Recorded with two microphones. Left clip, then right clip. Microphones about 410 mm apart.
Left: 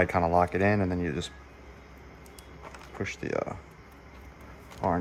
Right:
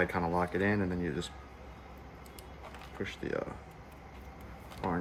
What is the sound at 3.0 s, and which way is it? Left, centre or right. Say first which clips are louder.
Speech: left 5 dB; centre.